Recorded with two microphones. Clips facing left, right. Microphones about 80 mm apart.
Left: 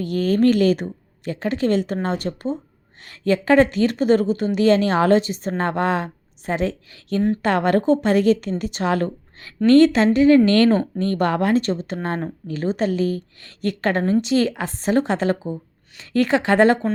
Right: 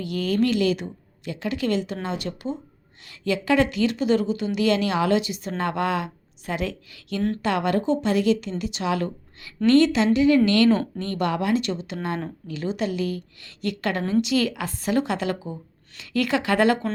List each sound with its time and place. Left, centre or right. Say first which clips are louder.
0.0 s a woman's voice: left 5 dB; left